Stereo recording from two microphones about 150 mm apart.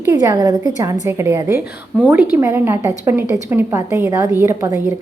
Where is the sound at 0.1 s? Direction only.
25° right (ahead or behind).